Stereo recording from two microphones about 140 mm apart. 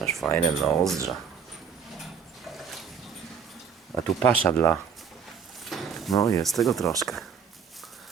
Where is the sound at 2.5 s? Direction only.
Centre (ahead or behind).